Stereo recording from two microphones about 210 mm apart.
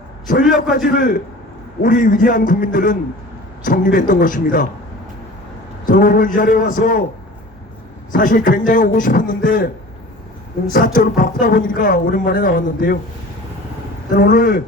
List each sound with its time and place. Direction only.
0.3 s speech: 40° left (ahead or behind)
5.8 s speech: 40° left (ahead or behind)
8.1 s speech: 40° left (ahead or behind)
10.7 s speech: 40° left (ahead or behind)
14.1 s a man's voice: 40° left (ahead or behind)